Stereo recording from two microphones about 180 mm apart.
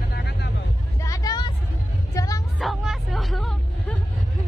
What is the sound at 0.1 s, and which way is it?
Vehicle, 70° left (ahead or behind).